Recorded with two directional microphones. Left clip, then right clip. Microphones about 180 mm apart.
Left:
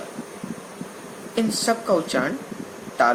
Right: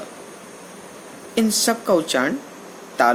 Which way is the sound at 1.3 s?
55° right (ahead or behind).